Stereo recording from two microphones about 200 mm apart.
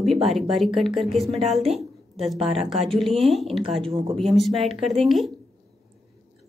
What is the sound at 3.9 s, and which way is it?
Speech, 15° right (ahead or behind).